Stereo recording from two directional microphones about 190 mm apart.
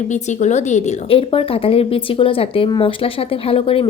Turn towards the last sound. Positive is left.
turn(degrees=30)  # may be behind; listen again after turning